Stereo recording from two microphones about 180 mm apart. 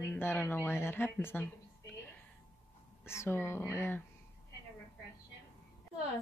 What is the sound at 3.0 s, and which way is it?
Speech, 15° left (ahead or behind).